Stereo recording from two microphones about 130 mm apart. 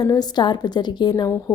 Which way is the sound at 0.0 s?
30° left (ahead or behind).